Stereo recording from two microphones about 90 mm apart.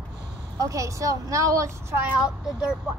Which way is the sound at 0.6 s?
35° right (ahead or behind).